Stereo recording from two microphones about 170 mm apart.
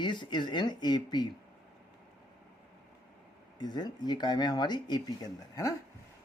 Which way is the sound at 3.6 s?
25° left (ahead or behind).